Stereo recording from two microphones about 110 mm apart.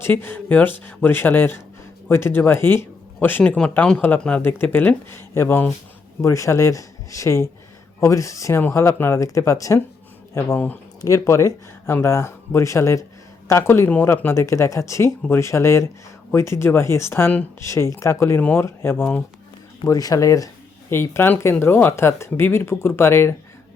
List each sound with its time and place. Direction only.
0.0 s speech: 20° left (ahead or behind)
4.4 s speech: 20° left (ahead or behind)
19.9 s speech: 35° left (ahead or behind)